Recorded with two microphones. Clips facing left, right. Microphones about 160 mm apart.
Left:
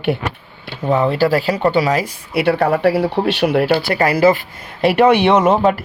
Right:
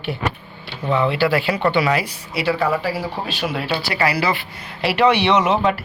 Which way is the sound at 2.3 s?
60° left (ahead or behind).